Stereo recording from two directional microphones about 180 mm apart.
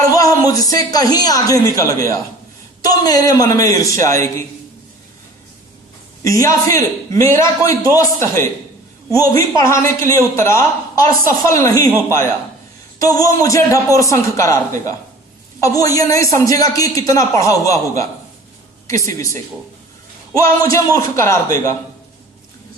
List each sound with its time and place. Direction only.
0.0 s a sound: 20° left (ahead or behind)
0.9 s a man's voice: 20° left (ahead or behind)
6.2 s a man's voice: 20° left (ahead or behind)
9.6 s a man's voice: 15° left (ahead or behind)
15.6 s a man's voice: 20° left (ahead or behind)